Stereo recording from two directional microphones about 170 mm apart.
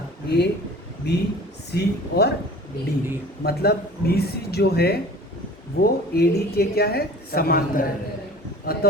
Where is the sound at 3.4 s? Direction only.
65° left (ahead or behind).